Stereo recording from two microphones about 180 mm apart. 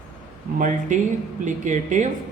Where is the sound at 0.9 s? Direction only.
45° right (ahead or behind).